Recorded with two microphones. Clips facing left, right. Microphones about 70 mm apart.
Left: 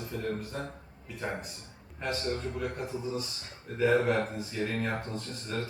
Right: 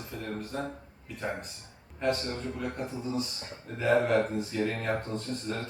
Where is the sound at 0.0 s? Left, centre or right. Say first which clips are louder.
Left 3 dB; centre.